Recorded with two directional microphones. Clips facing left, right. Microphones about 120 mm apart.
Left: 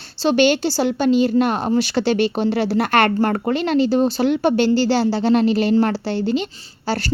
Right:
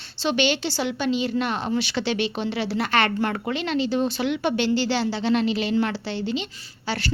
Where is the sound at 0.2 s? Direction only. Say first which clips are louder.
Left 7 dB; 40° left (ahead or behind).